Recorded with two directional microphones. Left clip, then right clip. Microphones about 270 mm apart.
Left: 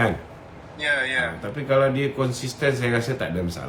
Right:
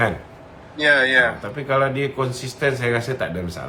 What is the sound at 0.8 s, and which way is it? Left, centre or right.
Speech, right.